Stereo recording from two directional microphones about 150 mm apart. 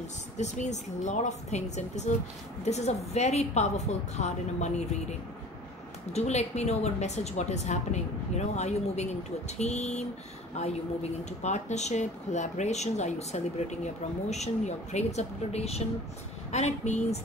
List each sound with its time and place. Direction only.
0.4 s speech: 50° left (ahead or behind)
6.1 s speech: 50° left (ahead or behind)